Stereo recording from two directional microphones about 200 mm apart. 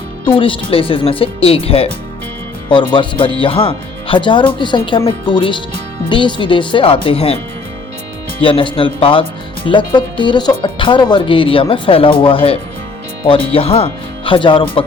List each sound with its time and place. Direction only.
0.3 s speech: 25° left (ahead or behind)
8.4 s speech: 25° left (ahead or behind)